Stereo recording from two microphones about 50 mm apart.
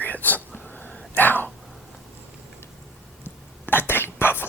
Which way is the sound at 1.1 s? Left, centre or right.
Left.